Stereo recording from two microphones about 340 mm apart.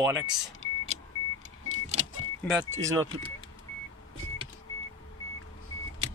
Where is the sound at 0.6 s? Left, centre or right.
Centre.